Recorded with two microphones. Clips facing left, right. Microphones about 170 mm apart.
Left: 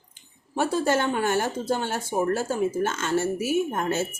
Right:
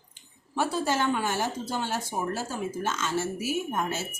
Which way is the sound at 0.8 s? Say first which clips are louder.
Left 3 dB; 55° left (ahead or behind).